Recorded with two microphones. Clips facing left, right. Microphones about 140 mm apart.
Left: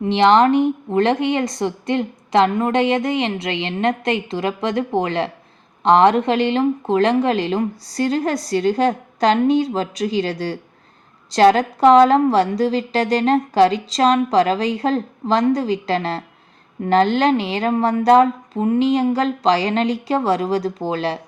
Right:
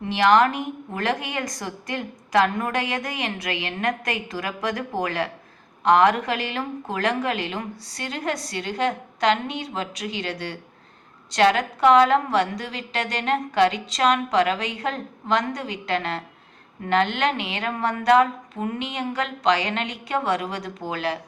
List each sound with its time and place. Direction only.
0.1 s a woman's voice: 25° left (ahead or behind)